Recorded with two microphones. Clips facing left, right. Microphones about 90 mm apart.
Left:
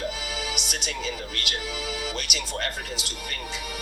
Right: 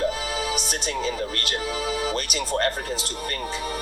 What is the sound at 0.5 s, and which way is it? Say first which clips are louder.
Speech: right 5 dB; 40° right (ahead or behind).